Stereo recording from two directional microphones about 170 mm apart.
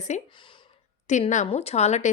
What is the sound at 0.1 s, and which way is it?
A woman's voice, 45° left (ahead or behind).